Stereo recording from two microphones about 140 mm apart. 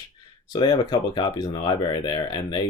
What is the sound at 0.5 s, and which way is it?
Speech, 30° left (ahead or behind).